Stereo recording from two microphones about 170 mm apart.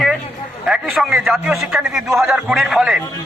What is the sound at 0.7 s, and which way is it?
A man's voice, 5° right (ahead or behind).